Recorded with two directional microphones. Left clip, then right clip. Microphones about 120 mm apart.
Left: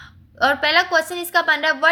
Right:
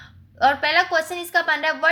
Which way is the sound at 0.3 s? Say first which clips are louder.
Left 1 dB; 35° left (ahead or behind).